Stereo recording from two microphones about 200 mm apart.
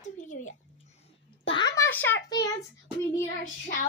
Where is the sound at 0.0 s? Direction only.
40° left (ahead or behind).